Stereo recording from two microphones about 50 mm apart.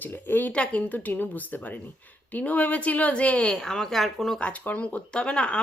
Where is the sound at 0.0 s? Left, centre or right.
Left.